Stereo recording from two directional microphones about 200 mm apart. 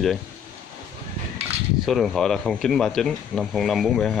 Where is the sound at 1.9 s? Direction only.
Centre (ahead or behind).